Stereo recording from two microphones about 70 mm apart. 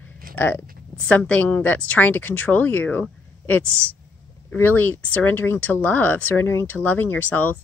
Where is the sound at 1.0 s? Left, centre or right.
Centre.